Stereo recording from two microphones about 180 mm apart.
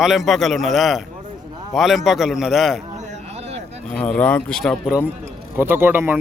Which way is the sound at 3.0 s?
40° right (ahead or behind).